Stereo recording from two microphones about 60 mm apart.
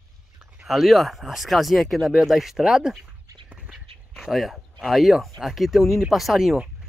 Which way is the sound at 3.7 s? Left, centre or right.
Centre.